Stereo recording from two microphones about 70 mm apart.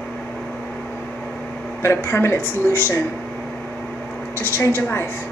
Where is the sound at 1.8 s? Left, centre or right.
Left.